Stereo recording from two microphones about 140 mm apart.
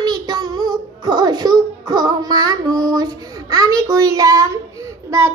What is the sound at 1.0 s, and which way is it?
Music, 30° right (ahead or behind).